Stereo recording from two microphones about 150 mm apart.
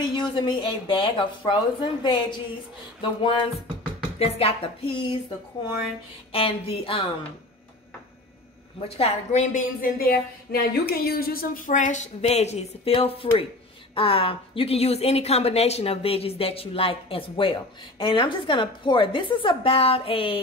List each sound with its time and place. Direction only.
0.0 s a woman's voice: 30° left (ahead or behind)
6.3 s a woman's voice: 40° left (ahead or behind)
8.8 s a woman's voice: 40° left (ahead or behind)